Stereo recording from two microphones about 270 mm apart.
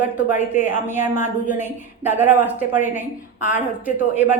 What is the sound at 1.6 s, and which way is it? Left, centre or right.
Speech, centre.